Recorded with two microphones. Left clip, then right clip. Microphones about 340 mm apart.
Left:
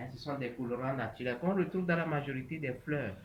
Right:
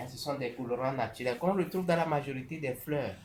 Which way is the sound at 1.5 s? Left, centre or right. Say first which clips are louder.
Right 3 dB; centre.